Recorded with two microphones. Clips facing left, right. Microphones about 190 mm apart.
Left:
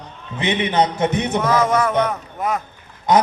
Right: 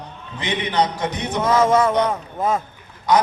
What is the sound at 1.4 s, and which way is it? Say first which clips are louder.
Speech: right 3 dB; 25° right (ahead or behind).